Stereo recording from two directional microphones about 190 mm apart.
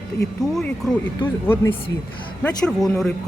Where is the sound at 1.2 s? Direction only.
10° left (ahead or behind).